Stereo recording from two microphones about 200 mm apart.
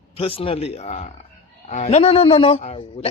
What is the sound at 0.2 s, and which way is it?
A man's voice, 30° left (ahead or behind).